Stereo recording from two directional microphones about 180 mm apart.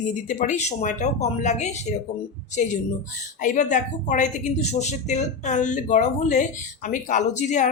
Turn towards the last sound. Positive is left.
turn(degrees=40)  # may be behind; listen again after turning